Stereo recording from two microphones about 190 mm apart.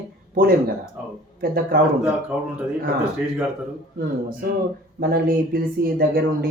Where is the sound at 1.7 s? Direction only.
50° right (ahead or behind).